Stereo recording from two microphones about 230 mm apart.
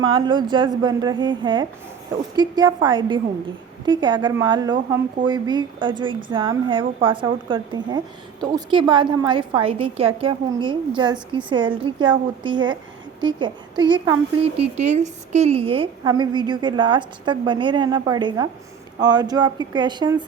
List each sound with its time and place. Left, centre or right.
0.0 s a woman's voice: centre